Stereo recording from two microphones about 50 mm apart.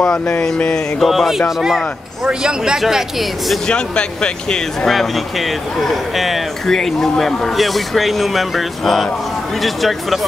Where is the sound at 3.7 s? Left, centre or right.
Centre.